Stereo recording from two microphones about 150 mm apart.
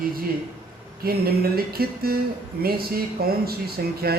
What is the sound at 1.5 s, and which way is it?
A man's voice, 90° right.